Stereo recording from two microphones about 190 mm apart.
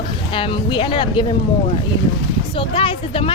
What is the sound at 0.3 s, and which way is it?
Speech, 25° left (ahead or behind).